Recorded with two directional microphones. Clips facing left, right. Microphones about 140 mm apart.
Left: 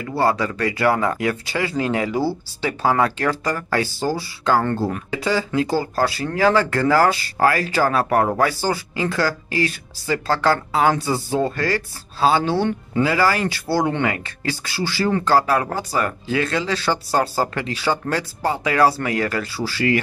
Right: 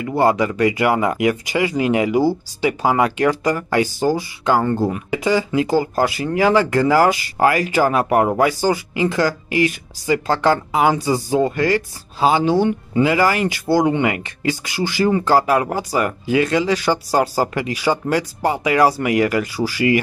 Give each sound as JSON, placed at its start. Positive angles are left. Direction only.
{"t": 0.0, "sound": "speech", "side_deg": -20}